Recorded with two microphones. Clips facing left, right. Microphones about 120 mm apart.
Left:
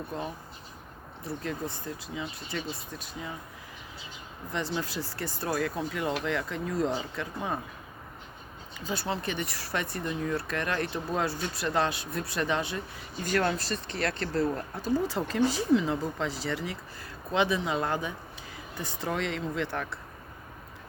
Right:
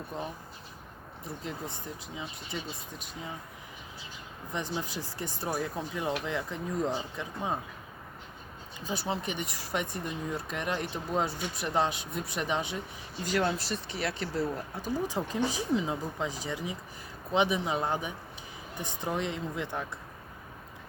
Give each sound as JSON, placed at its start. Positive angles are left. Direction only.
{"t": 1.2, "sound": "speech", "side_deg": -15}
{"t": 4.5, "sound": "speech", "side_deg": -15}
{"t": 8.9, "sound": "speech", "side_deg": -15}